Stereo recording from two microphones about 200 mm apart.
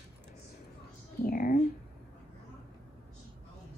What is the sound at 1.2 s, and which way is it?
Speech, 45° left (ahead or behind).